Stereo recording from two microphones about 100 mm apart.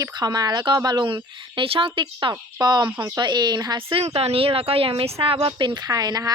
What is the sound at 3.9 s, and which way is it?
Speech, 80° right.